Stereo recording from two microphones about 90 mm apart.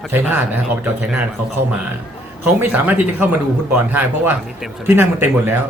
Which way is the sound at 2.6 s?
20° right (ahead or behind).